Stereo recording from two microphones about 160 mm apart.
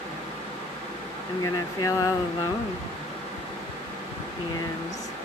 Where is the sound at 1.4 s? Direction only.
20° left (ahead or behind).